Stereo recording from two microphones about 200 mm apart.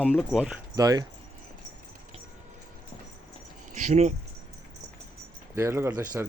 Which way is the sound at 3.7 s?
40° right (ahead or behind).